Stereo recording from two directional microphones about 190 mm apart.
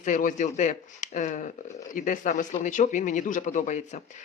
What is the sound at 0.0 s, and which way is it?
Speech, 40° left (ahead or behind).